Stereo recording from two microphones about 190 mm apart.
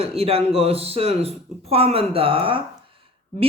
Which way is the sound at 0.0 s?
30° right (ahead or behind).